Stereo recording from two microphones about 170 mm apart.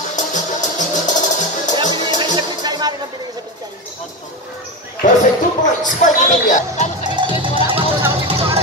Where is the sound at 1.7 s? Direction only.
25° right (ahead or behind).